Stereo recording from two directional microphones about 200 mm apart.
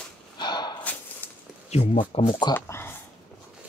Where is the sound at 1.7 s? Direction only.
35° left (ahead or behind).